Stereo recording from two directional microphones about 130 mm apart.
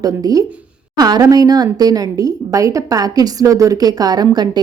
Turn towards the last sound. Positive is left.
turn(degrees=-30)  # may be behind; listen again after turning